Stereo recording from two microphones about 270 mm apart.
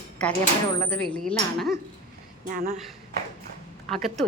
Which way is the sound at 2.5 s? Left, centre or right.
Right.